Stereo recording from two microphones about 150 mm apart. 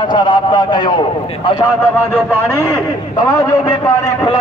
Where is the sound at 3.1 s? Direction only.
20° left (ahead or behind).